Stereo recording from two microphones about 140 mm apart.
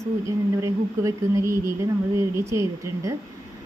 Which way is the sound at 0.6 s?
20° right (ahead or behind).